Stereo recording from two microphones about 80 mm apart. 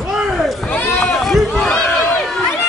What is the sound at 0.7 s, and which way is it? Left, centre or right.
Run, centre.